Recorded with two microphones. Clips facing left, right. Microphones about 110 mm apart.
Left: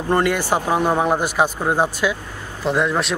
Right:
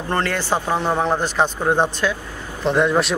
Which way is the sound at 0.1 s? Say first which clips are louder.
Left 3 dB; 15° left (ahead or behind).